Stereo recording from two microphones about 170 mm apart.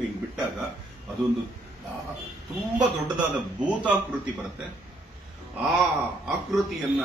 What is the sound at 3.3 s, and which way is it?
Speech, 10° right (ahead or behind).